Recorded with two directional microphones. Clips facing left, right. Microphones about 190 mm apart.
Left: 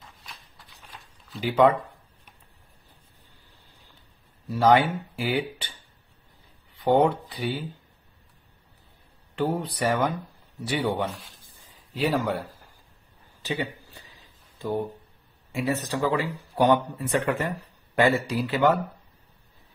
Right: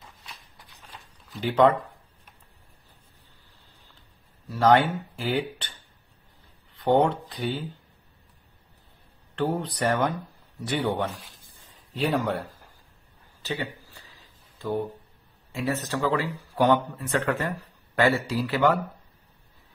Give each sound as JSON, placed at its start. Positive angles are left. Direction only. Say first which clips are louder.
{"t": 1.4, "sound": "a man's voice", "louder": "even", "side_deg": 10}
{"t": 4.5, "sound": "a man's voice", "louder": "even", "side_deg": 10}
{"t": 6.8, "sound": "a man's voice", "louder": "left 1 dB", "side_deg": 10}
{"t": 9.3, "sound": "a man's voice", "louder": "even", "side_deg": 10}
{"t": 13.4, "sound": "a sound", "louder": "left 2 dB", "side_deg": 15}
{"t": 15.5, "sound": "a man's voice", "louder": "left 1 dB", "side_deg": 15}